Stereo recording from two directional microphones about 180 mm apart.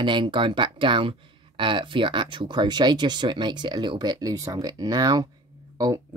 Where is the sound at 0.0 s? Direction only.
25° right (ahead or behind).